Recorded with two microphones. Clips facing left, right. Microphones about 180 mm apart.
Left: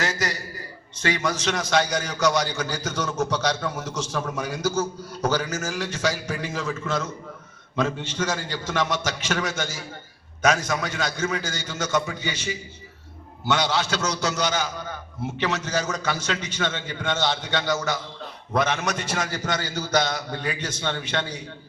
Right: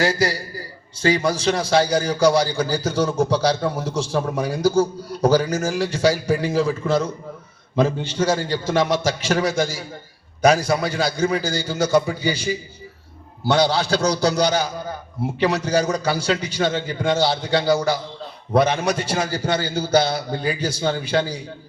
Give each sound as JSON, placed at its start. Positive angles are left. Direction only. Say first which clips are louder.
{"t": 0.0, "sound": "a man's voice", "louder": "right 7 dB", "side_deg": -35}